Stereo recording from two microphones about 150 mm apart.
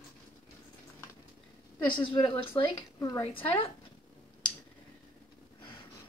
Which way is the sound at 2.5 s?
20° left (ahead or behind).